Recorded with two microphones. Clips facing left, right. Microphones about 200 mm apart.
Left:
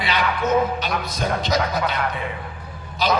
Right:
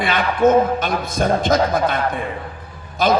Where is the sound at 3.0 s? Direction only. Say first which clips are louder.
Right 5 dB; 50° right (ahead or behind).